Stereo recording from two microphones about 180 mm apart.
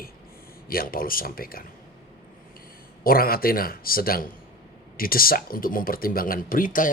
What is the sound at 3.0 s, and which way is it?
A man's voice, 55° left (ahead or behind).